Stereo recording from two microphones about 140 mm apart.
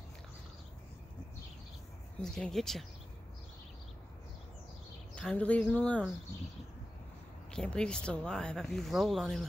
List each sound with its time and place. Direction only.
2.2 s speech: 5° left (ahead or behind)
5.1 s speech: 10° left (ahead or behind)
7.5 s speech: 5° left (ahead or behind)